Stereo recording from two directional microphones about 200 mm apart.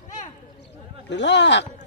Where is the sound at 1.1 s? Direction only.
60° left (ahead or behind).